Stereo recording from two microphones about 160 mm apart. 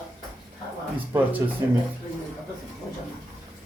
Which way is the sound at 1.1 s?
10° right (ahead or behind).